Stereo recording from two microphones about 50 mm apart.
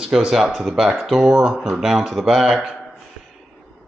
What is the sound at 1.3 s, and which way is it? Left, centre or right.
Speech, centre.